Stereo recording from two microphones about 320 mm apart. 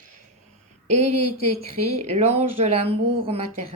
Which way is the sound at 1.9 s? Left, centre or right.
Centre.